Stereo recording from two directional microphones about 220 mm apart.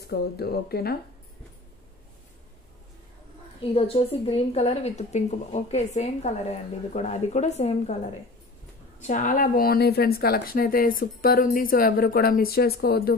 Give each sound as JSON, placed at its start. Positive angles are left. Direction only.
{"t": 0.0, "sound": "speech", "side_deg": 45}
{"t": 3.7, "sound": "a woman's voice", "side_deg": 25}
{"t": 9.0, "sound": "speech", "side_deg": 35}